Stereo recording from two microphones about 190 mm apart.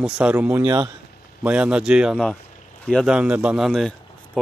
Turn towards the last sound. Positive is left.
turn(degrees=0)  # may be behind; listen again after turning